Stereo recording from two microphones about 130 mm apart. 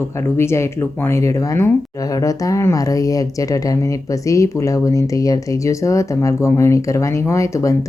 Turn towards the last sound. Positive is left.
turn(degrees=25)  # may be behind; listen again after turning